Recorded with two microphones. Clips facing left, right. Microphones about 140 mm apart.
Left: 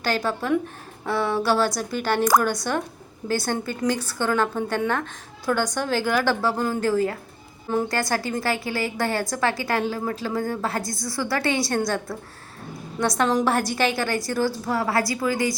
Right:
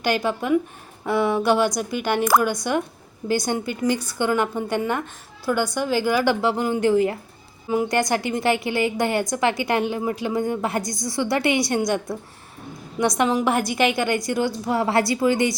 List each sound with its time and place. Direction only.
0.0 s a woman's voice: 15° right (ahead or behind)
3.2 s a woman's voice: 15° right (ahead or behind)